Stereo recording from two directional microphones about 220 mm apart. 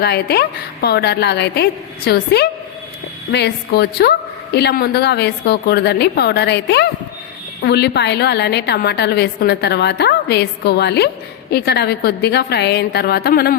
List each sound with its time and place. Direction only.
0.0 s a woman's voice: 45° left (ahead or behind)